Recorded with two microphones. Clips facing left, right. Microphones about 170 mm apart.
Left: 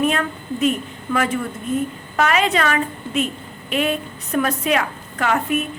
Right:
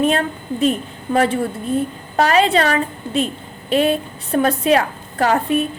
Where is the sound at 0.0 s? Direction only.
30° right (ahead or behind).